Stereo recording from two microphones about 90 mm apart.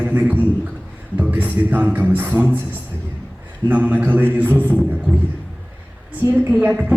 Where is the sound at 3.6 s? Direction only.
20° right (ahead or behind).